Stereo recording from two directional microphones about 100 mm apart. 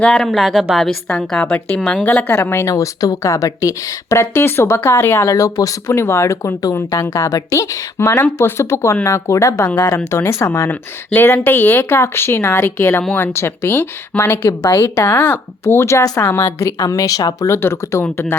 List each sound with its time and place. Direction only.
0.0 s a woman's voice: 10° left (ahead or behind); by 9.6 s 30° left (ahead or behind)
9.6 s a woman's voice: 20° left (ahead or behind); by 17.6 s 35° left (ahead or behind)
17.6 s speech: 25° left (ahead or behind)